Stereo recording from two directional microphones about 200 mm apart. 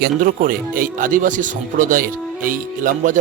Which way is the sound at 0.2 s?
45° right (ahead or behind).